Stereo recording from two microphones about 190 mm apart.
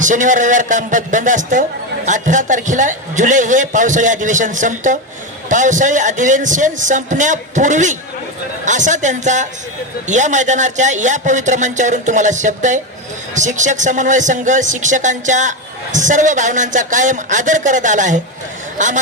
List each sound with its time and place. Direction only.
0.0 s a man's voice: 40° right (ahead or behind)